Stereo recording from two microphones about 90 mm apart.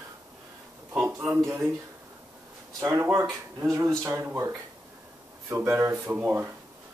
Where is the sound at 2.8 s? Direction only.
30° right (ahead or behind).